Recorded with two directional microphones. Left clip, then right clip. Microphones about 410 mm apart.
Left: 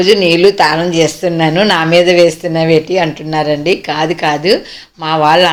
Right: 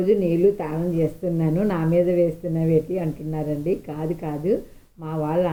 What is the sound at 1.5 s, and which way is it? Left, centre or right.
Speech, centre.